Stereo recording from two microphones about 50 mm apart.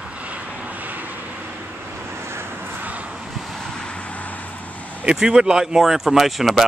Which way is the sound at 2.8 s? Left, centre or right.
Right.